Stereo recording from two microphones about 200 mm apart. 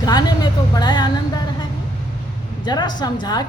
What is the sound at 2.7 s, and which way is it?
Speech, 20° left (ahead or behind).